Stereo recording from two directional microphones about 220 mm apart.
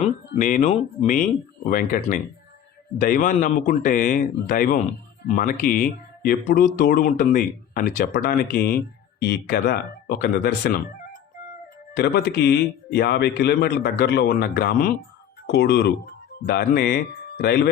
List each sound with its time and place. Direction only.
0.3 s a man's voice: 35° left (ahead or behind)
11.9 s a man's voice: 45° left (ahead or behind)